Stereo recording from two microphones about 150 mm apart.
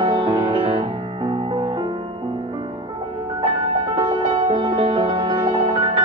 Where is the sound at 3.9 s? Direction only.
30° right (ahead or behind).